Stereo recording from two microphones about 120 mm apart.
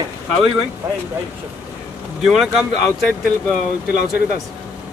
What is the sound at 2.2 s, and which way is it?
Speech, 5° right (ahead or behind).